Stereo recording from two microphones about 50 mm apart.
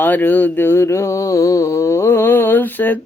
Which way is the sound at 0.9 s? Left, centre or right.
Left.